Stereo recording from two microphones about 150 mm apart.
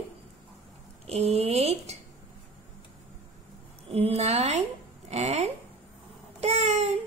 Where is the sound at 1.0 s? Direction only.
45° right (ahead or behind).